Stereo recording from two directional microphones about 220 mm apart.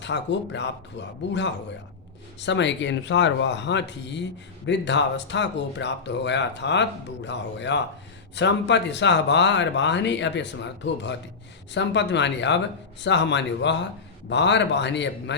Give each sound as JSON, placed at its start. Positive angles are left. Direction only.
{"t": 0.0, "sound": "speech", "side_deg": 55}